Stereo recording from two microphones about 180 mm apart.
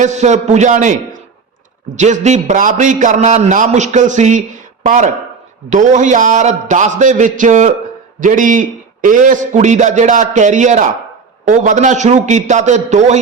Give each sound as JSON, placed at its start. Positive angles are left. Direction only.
{"t": 0.0, "sound": "a man's voice", "side_deg": -40}
{"t": 2.0, "sound": "a man's voice", "side_deg": -40}